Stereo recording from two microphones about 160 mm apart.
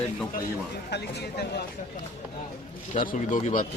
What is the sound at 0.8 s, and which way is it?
Speech, 90° left.